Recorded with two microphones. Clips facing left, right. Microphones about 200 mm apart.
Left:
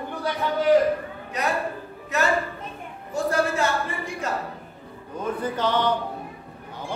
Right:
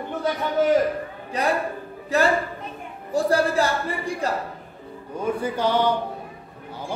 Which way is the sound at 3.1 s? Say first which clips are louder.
Right 3 dB; 35° right (ahead or behind).